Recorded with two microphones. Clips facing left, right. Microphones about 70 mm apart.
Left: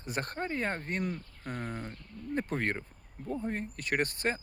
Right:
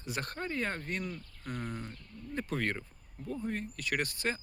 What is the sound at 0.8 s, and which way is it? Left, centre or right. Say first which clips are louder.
Speech: left 3 dB; left.